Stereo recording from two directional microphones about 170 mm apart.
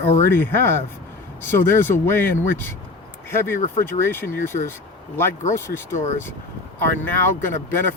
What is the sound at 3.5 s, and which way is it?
Speech, 40° left (ahead or behind).